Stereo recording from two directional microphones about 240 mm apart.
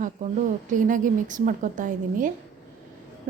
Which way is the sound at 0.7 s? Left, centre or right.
Right.